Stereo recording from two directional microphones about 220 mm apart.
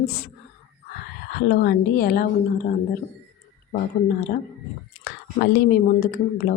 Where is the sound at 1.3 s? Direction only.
45° left (ahead or behind).